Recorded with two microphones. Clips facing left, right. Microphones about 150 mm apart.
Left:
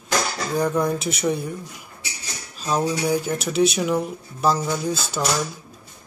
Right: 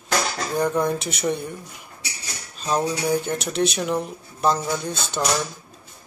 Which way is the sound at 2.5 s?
5° left (ahead or behind).